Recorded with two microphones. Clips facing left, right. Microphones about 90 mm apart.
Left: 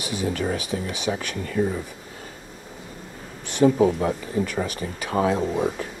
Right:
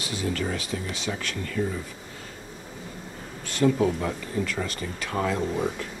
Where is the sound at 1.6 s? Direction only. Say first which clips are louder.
Left 5 dB; 40° left (ahead or behind).